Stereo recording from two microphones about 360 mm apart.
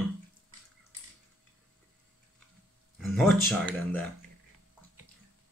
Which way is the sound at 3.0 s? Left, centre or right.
Centre.